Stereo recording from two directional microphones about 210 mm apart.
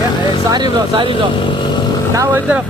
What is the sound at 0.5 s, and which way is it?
Speech, 20° right (ahead or behind).